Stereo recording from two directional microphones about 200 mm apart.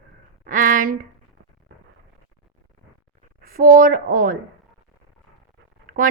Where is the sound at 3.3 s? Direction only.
45° right (ahead or behind).